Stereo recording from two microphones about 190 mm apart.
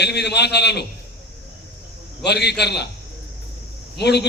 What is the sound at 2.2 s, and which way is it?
Speech, 60° left (ahead or behind).